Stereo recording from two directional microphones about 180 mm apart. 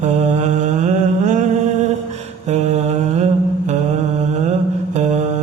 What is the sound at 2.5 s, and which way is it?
Mantra, 40° right (ahead or behind).